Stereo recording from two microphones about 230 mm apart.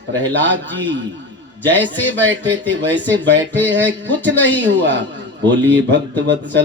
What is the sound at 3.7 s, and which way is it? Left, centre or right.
Speech, right.